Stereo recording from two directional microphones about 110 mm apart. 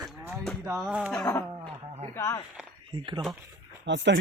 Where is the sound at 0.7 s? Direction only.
Centre (ahead or behind).